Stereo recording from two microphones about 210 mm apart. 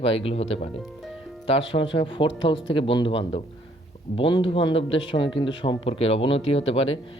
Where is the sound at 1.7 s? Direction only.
25° left (ahead or behind).